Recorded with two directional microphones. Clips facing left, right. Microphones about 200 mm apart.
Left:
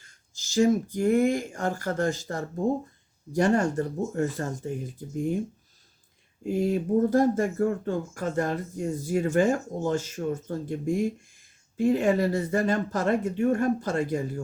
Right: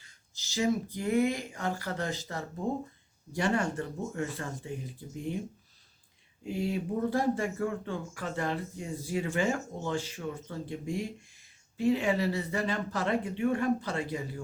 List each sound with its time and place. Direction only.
0.0 s speech: 45° left (ahead or behind)
6.4 s speech: 45° left (ahead or behind)